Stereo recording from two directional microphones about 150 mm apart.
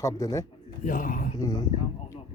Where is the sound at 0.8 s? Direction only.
65° left (ahead or behind).